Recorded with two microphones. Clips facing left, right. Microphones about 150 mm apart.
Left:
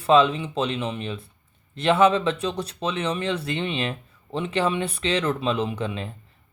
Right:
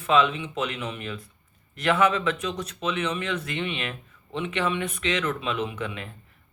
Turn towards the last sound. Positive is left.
turn(degrees=30)  # may be behind; listen again after turning